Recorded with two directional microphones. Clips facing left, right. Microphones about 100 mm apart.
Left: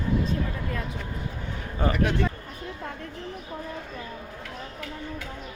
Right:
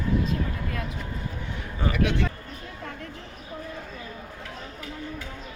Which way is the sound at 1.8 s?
35° left (ahead or behind).